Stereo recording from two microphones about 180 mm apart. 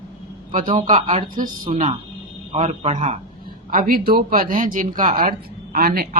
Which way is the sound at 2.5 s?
40° right (ahead or behind).